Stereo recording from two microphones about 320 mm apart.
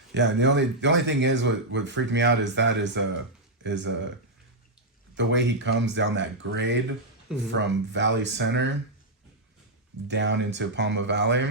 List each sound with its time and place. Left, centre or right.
0.1 s speech: right
5.1 s speech: right
10.1 s speech: right